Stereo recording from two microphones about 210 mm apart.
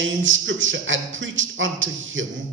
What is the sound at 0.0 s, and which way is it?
Music, 65° right (ahead or behind).